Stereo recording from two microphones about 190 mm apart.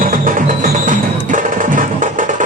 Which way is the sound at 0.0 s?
45° right (ahead or behind).